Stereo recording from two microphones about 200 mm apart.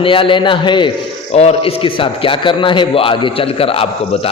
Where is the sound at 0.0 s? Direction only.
25° left (ahead or behind).